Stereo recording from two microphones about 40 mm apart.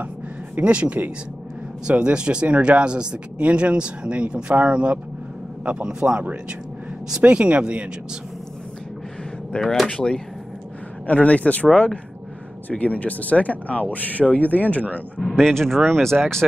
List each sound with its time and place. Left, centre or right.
0.6 s speech: right
2.4 s speech: right
7.2 s speech: right
9.6 s speech: centre
11.1 s speech: left
15.1 s speech: centre